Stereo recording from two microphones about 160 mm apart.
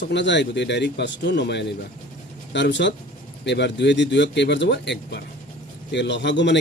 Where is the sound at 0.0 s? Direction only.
90° left.